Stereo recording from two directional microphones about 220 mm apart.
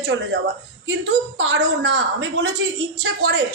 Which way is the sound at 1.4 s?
55° right (ahead or behind).